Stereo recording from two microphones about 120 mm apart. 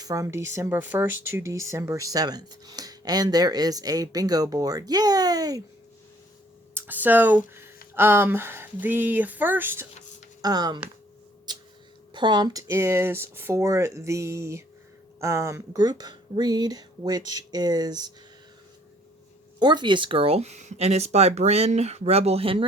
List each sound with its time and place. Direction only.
0.0 s speech: 30° right (ahead or behind)
6.7 s speech: 15° right (ahead or behind)
10.4 s speech: 35° right (ahead or behind)
11.5 s a sound: 35° right (ahead or behind)
12.1 s speech: 40° right (ahead or behind)
19.5 s speech: 40° right (ahead or behind)